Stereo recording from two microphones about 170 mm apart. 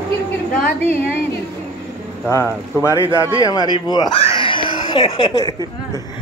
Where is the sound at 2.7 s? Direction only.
15° left (ahead or behind).